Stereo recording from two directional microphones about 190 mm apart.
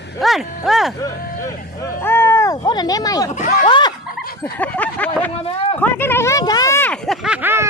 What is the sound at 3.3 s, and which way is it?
Speech, 40° left (ahead or behind).